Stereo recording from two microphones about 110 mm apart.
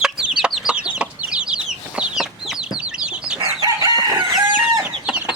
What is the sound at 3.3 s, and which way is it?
Chicken, 35° right (ahead or behind).